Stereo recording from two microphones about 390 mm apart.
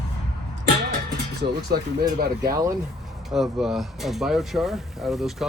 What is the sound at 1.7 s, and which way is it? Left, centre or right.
Speech, right.